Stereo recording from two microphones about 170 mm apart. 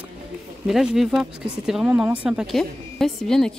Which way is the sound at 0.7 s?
Centre (ahead or behind).